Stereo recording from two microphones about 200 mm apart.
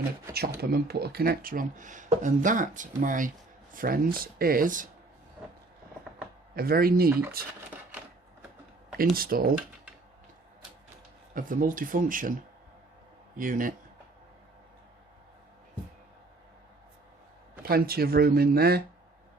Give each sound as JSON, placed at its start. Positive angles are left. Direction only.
{"t": 0.3, "sound": "speech", "side_deg": -50}
{"t": 6.6, "sound": "speech", "side_deg": -50}
{"t": 7.1, "sound": "speech", "side_deg": -10}
{"t": 9.1, "sound": "speech", "side_deg": -45}
{"t": 11.3, "sound": "speech", "side_deg": -45}
{"t": 13.3, "sound": "speech", "side_deg": -40}
{"t": 17.6, "sound": "speech", "side_deg": -50}